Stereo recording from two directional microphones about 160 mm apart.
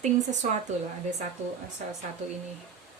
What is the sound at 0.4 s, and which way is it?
Speech, 50° right (ahead or behind).